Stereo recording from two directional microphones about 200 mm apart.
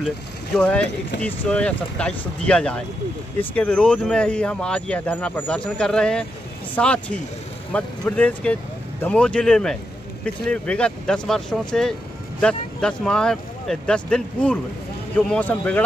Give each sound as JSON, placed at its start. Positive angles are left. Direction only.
{"t": 0.6, "sound": "speech", "side_deg": 5}